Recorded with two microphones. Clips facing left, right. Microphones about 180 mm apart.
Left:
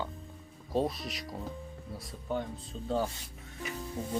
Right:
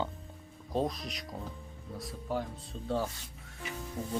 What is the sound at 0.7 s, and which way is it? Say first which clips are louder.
Speech: left 1 dB; 5° left (ahead or behind).